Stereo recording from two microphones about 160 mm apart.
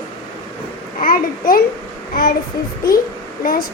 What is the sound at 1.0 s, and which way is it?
Speech, 60° left (ahead or behind).